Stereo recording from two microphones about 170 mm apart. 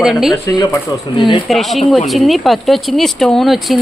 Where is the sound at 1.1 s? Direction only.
25° left (ahead or behind).